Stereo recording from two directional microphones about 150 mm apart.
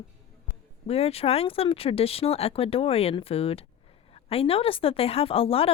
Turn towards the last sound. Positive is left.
turn(degrees=40)  # may be behind; listen again after turning